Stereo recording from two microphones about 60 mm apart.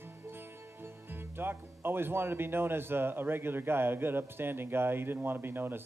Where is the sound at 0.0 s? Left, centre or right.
Right.